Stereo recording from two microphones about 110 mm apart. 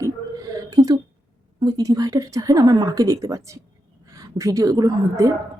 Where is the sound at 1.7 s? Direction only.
35° right (ahead or behind).